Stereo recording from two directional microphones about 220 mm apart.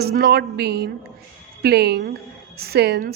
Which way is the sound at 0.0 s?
45° right (ahead or behind).